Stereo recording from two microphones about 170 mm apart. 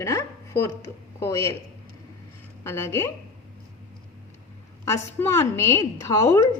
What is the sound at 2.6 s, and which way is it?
Speech, 15° left (ahead or behind).